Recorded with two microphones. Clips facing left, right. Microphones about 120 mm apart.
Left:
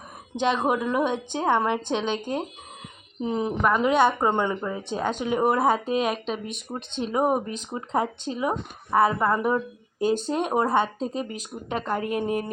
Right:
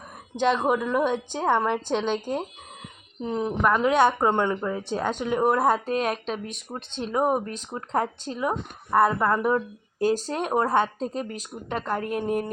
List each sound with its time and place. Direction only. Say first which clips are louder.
0.3 s speech: right 1 dB; centre (ahead or behind)
3.2 s speech: left 1 dB; 5° left (ahead or behind)